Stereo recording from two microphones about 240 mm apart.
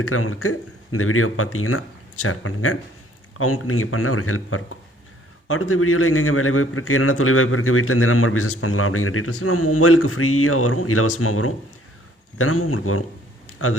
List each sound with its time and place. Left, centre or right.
0.0 s a man's voice: left